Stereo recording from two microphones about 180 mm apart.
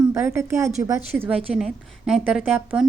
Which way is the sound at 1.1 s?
5° right (ahead or behind).